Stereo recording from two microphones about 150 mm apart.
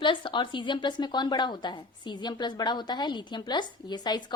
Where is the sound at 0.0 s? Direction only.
30° left (ahead or behind).